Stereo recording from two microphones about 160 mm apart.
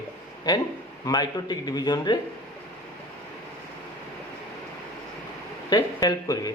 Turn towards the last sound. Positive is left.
turn(degrees=20)  # may be behind; listen again after turning